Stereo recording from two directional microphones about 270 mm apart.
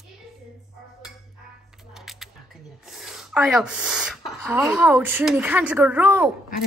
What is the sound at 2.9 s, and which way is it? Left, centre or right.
Speech, centre.